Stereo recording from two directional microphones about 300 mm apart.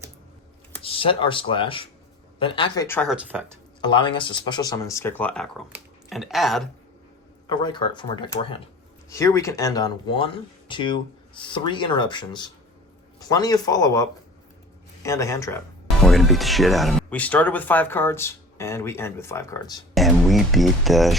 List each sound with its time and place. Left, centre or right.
0.8 s speech: centre
3.8 s speech: centre
7.4 s speech: centre
19.9 s speech: centre